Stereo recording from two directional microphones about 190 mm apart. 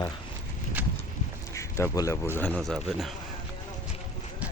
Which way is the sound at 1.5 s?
15° left (ahead or behind).